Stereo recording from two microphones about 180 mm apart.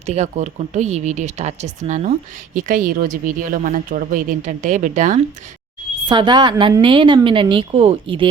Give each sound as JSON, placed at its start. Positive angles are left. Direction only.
{"t": 0.0, "sound": "speech", "side_deg": -40}
{"t": 6.1, "sound": "speech", "side_deg": -25}